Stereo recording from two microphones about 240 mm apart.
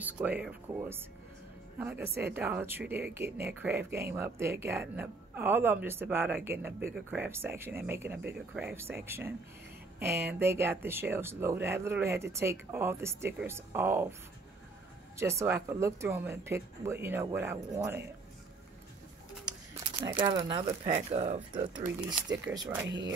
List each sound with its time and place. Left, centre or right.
0.0 s speech: centre
10.4 s speech: centre
15.1 s speech: centre
20.1 s speech: centre
22.5 s speech: centre
22.8 s speech: right